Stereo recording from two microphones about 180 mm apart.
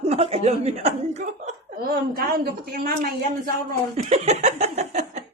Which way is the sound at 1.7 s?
55° right (ahead or behind).